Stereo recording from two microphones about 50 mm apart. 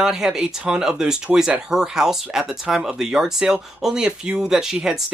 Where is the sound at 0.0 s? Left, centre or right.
Centre.